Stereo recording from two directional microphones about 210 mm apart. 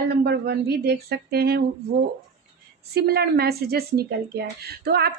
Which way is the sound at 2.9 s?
50° right (ahead or behind).